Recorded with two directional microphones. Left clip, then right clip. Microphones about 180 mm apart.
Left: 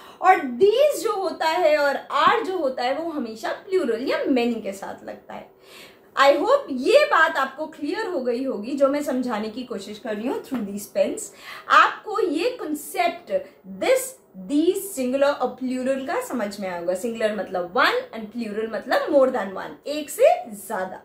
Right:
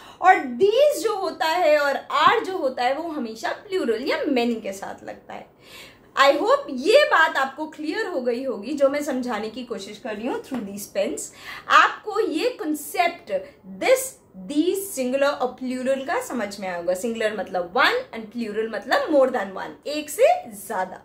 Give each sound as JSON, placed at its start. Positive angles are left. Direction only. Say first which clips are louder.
{"t": 0.2, "sound": "a woman's voice", "louder": "even", "side_deg": -20}